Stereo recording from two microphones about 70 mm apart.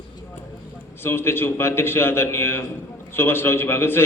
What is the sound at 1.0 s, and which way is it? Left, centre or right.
A man's voice, left.